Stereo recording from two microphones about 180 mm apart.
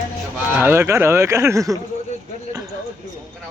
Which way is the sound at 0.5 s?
10° right (ahead or behind).